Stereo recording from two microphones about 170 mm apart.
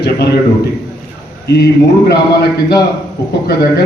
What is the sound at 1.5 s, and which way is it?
A man's voice, 75° left (ahead or behind).